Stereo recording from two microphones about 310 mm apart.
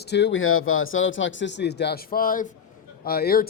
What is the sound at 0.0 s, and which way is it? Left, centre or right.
Speech, left.